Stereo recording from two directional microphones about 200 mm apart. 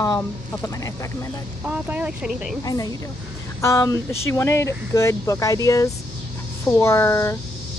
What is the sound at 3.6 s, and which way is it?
Speech, 15° left (ahead or behind).